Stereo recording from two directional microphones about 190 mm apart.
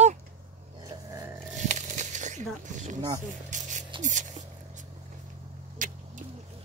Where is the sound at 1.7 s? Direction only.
40° right (ahead or behind).